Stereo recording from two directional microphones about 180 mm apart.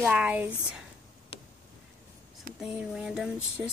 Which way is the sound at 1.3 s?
30° left (ahead or behind).